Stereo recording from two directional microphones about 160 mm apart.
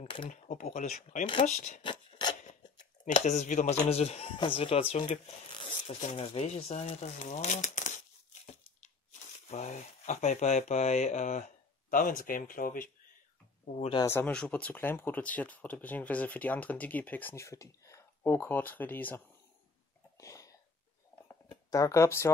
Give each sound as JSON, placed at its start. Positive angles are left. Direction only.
{"t": 0.0, "sound": "a sound", "side_deg": 30}
{"t": 0.3, "sound": "speech", "side_deg": 50}
{"t": 1.8, "sound": "filing", "side_deg": 30}
{"t": 3.2, "sound": "speech", "side_deg": 45}
{"t": 14.0, "sound": "speech", "side_deg": 10}
{"t": 20.2, "sound": "a sound", "side_deg": 20}
{"t": 21.5, "sound": "speech", "side_deg": 20}